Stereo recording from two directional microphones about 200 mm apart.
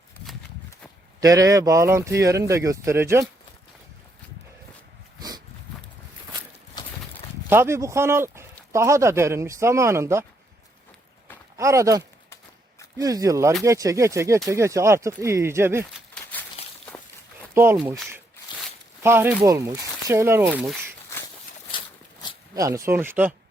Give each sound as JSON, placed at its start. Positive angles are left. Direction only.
{"t": 1.2, "sound": "speech", "side_deg": -15}
{"t": 7.5, "sound": "speech", "side_deg": -15}
{"t": 11.5, "sound": "speech", "side_deg": -15}
{"t": 16.6, "sound": "walk", "side_deg": 30}
{"t": 17.5, "sound": "speech", "side_deg": -10}
{"t": 19.0, "sound": "speech", "side_deg": -10}
{"t": 22.5, "sound": "speech", "side_deg": -15}